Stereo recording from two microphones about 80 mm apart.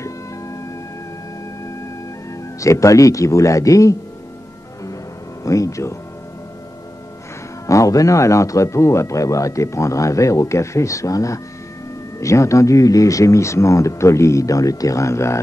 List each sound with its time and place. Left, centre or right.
2.6 s speech: left
5.4 s speech: left
7.6 s speech: left